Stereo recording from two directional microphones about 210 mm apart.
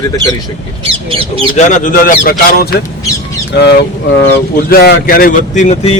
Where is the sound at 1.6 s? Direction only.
35° left (ahead or behind).